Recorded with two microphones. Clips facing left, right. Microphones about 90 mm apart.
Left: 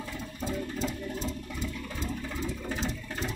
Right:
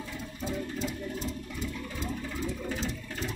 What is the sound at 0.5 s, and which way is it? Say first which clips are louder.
Music: left 1 dB; 35° left (ahead or behind).